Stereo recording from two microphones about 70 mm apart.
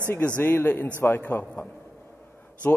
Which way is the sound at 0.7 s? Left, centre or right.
Left.